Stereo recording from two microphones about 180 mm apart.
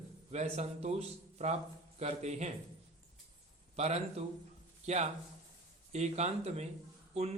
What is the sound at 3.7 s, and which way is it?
Speech, 35° right (ahead or behind).